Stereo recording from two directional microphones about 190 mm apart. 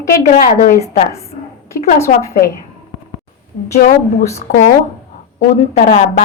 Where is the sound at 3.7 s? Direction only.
40° left (ahead or behind).